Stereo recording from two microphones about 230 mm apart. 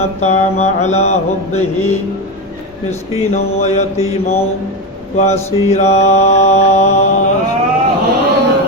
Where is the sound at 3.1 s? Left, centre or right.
Left.